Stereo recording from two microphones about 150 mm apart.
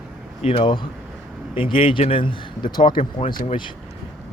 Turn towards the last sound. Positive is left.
turn(degrees=55)  # may be behind; listen again after turning